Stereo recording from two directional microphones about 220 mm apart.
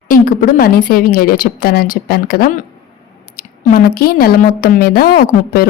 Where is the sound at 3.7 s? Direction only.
40° left (ahead or behind).